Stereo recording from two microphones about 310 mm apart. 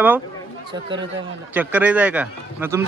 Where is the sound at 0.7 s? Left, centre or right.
Centre.